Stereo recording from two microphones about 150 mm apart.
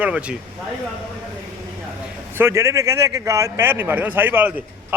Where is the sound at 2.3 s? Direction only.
15° right (ahead or behind).